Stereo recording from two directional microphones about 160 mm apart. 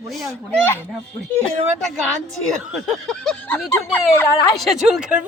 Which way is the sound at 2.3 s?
Centre (ahead or behind).